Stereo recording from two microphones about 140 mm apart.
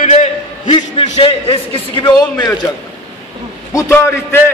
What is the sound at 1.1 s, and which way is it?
A man's voice, 45° left (ahead or behind).